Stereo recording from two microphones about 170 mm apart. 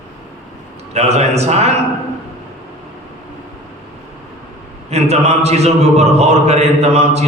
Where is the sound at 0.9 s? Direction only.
40° right (ahead or behind).